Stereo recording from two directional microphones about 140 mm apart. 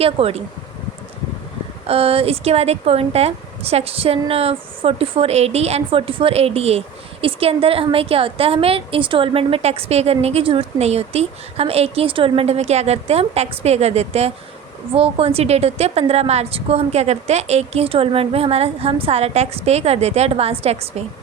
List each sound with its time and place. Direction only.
0.0 s a woman's voice: 45° right (ahead or behind)
1.9 s a woman's voice: 45° right (ahead or behind)